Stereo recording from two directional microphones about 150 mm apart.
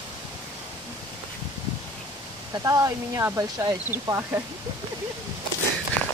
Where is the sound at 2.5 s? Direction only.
20° right (ahead or behind).